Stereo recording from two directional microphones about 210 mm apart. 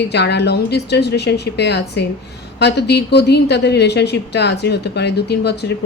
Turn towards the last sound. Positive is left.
turn(degrees=55)  # may be behind; listen again after turning